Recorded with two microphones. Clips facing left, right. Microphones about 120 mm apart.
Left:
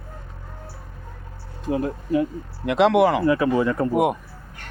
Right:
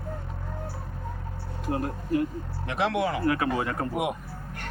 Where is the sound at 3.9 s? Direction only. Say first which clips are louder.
Left 9 dB; 50° left (ahead or behind).